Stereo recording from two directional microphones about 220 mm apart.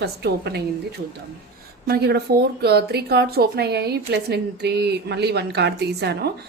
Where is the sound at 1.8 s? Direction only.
45° right (ahead or behind).